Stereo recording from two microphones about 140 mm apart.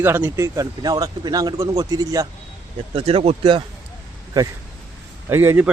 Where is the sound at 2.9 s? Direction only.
45° right (ahead or behind).